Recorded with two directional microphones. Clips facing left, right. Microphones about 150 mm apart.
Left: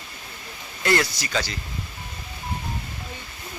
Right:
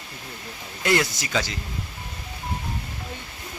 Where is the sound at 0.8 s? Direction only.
15° right (ahead or behind).